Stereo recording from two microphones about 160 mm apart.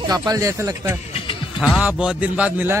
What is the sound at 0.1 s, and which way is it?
Speech, 20° right (ahead or behind).